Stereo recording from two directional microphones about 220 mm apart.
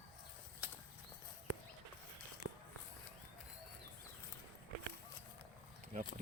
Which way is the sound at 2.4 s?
90° left.